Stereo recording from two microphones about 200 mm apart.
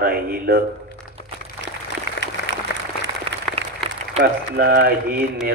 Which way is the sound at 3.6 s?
30° right (ahead or behind).